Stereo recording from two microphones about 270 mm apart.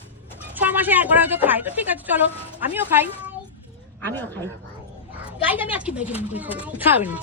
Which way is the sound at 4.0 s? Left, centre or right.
Centre.